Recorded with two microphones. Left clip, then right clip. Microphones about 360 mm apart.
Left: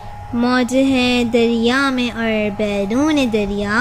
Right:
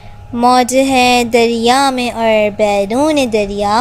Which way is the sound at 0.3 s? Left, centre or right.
Centre.